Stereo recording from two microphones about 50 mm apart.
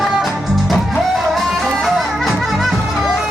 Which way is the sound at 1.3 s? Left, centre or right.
Centre.